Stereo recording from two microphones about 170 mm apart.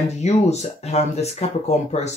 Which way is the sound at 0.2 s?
40° left (ahead or behind).